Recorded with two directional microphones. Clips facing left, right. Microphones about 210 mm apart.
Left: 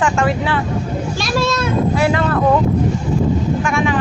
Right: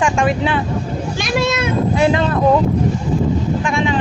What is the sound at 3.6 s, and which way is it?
Vehicle, 20° right (ahead or behind).